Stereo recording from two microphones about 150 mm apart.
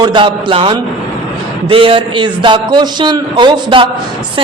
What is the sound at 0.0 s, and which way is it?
A man's voice, 30° right (ahead or behind).